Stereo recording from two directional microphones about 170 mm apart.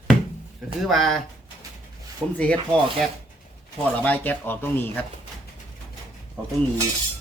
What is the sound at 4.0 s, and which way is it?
Speech, 10° left (ahead or behind).